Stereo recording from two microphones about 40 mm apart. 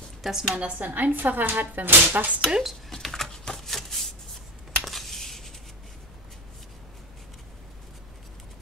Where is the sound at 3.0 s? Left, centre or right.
Centre.